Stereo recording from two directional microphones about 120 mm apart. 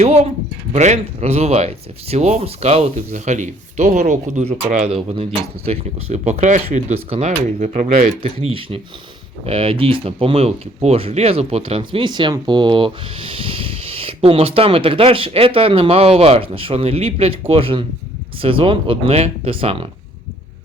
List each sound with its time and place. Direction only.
0.0 s speech: 60° right (ahead or behind)
0.7 s speech: 75° right (ahead or behind)
8.2 s speech: 55° right (ahead or behind)